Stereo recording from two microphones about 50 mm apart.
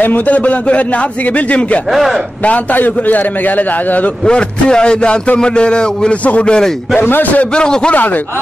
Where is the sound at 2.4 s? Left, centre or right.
Left.